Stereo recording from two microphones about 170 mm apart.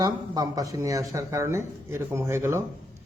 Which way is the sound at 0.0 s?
20° right (ahead or behind).